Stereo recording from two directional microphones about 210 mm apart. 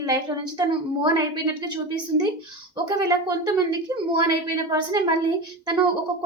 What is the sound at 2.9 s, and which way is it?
A woman's voice, 15° right (ahead or behind).